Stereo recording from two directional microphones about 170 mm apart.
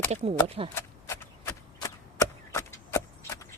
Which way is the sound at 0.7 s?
15° left (ahead or behind).